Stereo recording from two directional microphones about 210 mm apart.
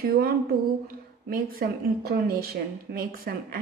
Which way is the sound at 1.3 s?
45° right (ahead or behind).